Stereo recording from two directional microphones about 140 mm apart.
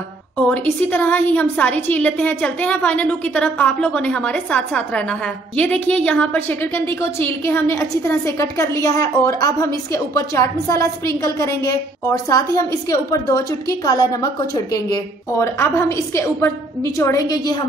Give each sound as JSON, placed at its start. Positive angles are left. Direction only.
{"t": 0.5, "sound": "a woman's voice", "side_deg": 10}